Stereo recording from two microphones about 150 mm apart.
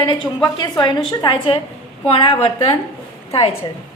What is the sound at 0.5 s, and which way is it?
A woman's voice, 30° left (ahead or behind).